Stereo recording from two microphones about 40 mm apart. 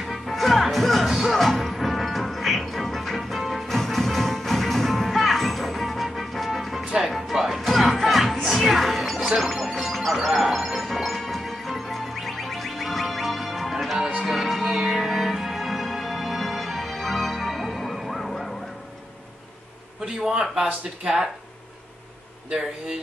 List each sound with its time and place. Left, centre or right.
0.0 s music: centre
20.2 s speech: centre